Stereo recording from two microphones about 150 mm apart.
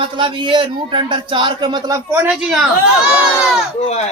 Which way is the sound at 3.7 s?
45° left (ahead or behind).